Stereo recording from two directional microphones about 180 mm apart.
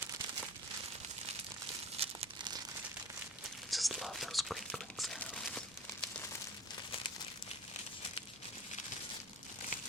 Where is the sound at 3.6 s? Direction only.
Centre (ahead or behind).